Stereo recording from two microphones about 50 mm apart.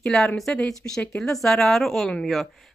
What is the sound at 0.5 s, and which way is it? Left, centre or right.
Speech, left.